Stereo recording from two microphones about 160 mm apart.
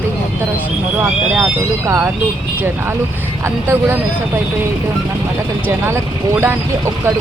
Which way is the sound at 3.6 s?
15° right (ahead or behind).